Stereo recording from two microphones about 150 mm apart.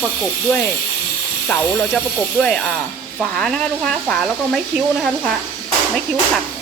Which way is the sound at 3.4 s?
5° left (ahead or behind).